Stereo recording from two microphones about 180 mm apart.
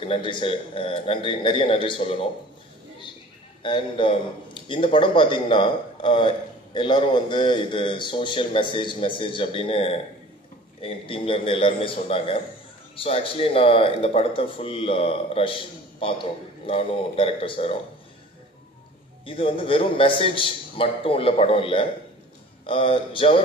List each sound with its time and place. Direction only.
0.0 s a man's voice: 30° left (ahead or behind)
3.6 s a man's voice: 30° left (ahead or behind)
19.2 s speech: 30° left (ahead or behind)